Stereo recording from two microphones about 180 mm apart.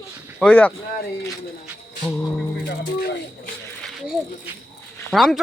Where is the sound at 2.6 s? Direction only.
55° left (ahead or behind).